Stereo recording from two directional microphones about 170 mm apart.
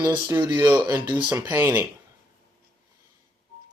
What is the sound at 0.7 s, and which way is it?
Speech, 10° right (ahead or behind).